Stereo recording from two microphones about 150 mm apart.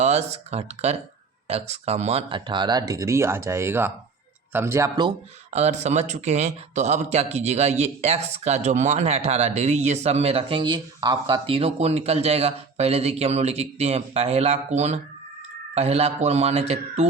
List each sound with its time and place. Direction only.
0.0 s speech: 45° right (ahead or behind); by 4.9 s 15° right (ahead or behind)
5.5 s speech: 50° right (ahead or behind)